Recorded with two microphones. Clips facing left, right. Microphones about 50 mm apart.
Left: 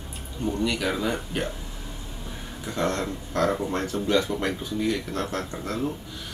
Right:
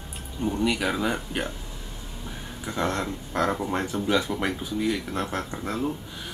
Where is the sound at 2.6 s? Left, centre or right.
Centre.